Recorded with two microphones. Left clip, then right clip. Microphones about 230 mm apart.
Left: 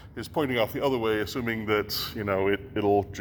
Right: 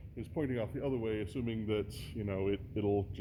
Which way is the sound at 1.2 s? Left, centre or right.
Left.